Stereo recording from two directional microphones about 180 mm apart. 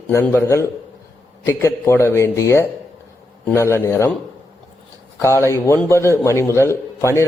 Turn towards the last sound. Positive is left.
turn(degrees=15)  # may be behind; listen again after turning